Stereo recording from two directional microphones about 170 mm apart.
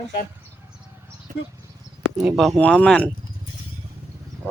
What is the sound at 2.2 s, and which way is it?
Speech, centre (ahead or behind).